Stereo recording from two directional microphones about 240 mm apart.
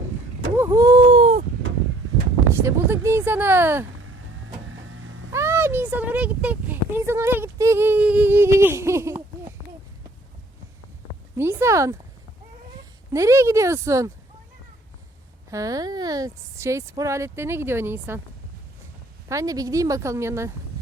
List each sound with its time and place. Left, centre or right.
0.5 s vehicle: centre
1.1 s a sound: right
2.5 s speech: centre
4.9 s cat: right
5.3 s speech: centre
11.3 s speech: centre
13.1 s speech: centre
15.4 s speech: centre
19.3 s speech: centre